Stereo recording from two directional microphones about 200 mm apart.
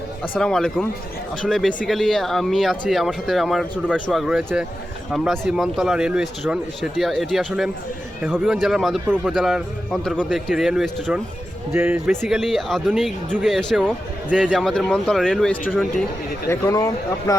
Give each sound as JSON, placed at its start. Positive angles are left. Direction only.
{"t": 0.3, "sound": "speech", "side_deg": 5}
{"t": 11.7, "sound": "speech", "side_deg": -10}
{"t": 12.2, "sound": "speech", "side_deg": 0}
{"t": 16.5, "sound": "speech", "side_deg": 15}